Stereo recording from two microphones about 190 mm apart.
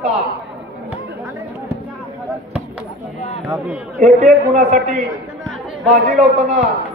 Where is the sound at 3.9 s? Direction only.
40° right (ahead or behind).